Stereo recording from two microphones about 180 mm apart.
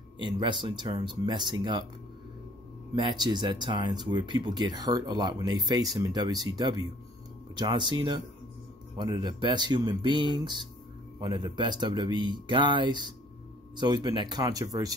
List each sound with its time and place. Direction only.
0.2 s speech: 25° right (ahead or behind)
3.0 s speech: 25° right (ahead or behind)